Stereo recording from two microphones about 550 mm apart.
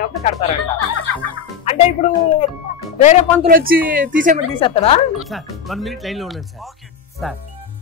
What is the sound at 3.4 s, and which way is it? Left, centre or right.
Speech, centre.